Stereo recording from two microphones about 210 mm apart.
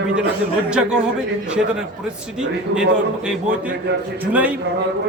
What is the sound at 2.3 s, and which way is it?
A man's voice, 5° right (ahead or behind).